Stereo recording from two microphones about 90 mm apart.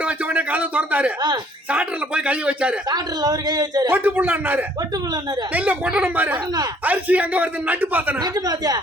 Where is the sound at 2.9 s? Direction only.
50° right (ahead or behind).